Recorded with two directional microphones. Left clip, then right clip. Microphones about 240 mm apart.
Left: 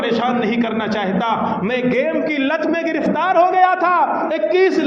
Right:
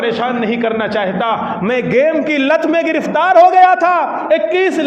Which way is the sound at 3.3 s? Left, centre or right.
Right.